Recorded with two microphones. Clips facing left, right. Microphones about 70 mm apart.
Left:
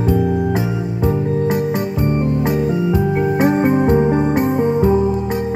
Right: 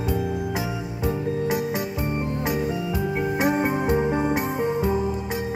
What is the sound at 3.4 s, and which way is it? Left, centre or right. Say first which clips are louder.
Music: left 8 dB; centre.